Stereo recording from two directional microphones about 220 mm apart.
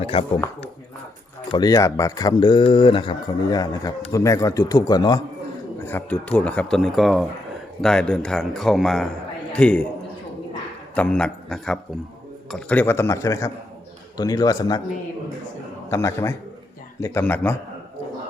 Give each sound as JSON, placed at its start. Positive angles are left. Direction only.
{"t": 0.0, "sound": "speech", "side_deg": 25}
{"t": 1.5, "sound": "a man's voice", "side_deg": 20}
{"t": 10.9, "sound": "a man's voice", "side_deg": 5}
{"t": 15.9, "sound": "speech", "side_deg": 10}